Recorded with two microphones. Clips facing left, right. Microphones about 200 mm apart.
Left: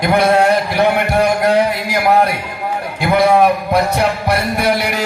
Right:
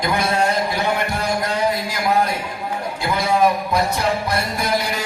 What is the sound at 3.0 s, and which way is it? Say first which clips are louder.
Music: left 7 dB; 65° left (ahead or behind).